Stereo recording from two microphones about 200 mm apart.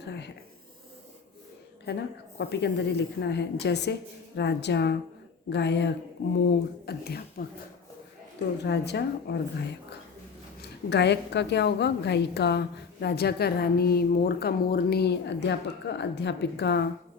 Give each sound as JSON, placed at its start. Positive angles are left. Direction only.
{"t": 0.0, "sound": "a sound", "side_deg": 60}
{"t": 1.9, "sound": "a woman's voice", "side_deg": 55}
{"t": 8.6, "sound": "a woman's voice", "side_deg": 55}